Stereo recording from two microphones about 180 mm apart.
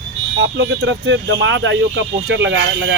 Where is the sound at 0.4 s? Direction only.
90° right.